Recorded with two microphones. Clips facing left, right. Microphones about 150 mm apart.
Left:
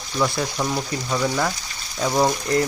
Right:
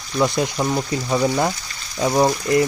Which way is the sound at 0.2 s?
15° right (ahead or behind).